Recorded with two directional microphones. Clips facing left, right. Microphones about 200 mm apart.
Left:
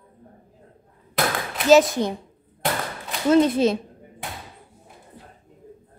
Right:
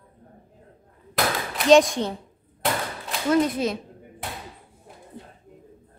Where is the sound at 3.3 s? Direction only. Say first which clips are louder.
Left 5 dB; 25° left (ahead or behind).